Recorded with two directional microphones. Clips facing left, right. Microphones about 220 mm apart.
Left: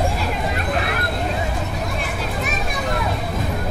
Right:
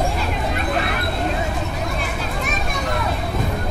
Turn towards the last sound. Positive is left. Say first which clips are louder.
# even
turn(degrees=0)  # may be behind; listen again after turning